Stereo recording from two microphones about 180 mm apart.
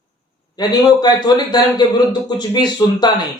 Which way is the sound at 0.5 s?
20° left (ahead or behind).